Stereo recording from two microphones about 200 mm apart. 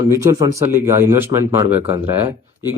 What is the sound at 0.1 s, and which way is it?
Speech, 15° right (ahead or behind).